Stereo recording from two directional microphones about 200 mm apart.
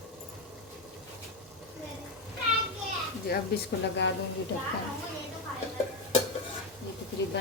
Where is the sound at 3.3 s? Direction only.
50° left (ahead or behind).